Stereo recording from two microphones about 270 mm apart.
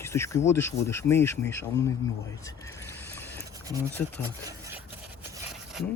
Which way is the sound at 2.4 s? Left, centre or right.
Centre.